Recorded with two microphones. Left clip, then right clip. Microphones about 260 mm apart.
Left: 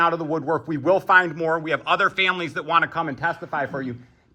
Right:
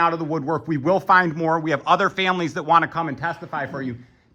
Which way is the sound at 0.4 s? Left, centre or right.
Right.